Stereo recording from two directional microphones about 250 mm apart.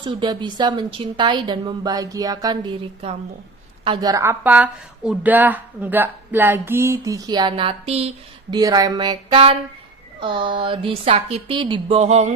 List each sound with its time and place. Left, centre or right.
0.0 s a woman's voice: centre